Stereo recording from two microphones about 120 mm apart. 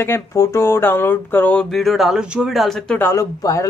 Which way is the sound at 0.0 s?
25° left (ahead or behind).